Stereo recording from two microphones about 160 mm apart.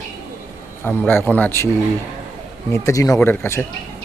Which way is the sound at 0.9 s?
15° left (ahead or behind).